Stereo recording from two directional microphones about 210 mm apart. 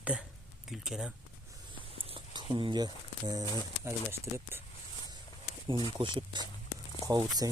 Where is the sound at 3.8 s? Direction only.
10° right (ahead or behind).